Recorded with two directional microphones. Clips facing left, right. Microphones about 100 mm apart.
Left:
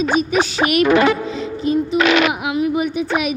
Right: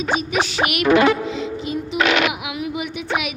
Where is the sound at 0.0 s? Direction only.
40° left (ahead or behind).